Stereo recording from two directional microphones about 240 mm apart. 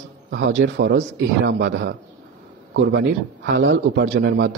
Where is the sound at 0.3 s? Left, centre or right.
Right.